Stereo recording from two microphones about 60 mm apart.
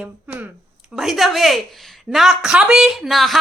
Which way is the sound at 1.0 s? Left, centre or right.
Centre.